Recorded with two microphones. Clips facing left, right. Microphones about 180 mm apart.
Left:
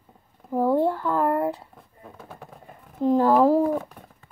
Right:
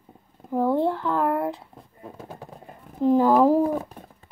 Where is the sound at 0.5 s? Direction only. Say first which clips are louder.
Left 1 dB; 10° left (ahead or behind).